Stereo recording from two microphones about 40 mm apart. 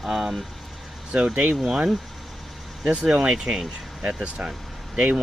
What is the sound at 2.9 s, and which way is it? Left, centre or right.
Speech, right.